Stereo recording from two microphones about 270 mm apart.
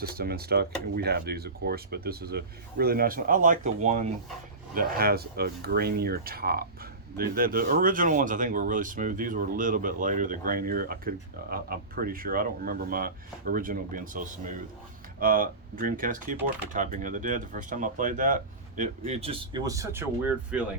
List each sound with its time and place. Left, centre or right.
0.0 s speech: right; by 20.1 s centre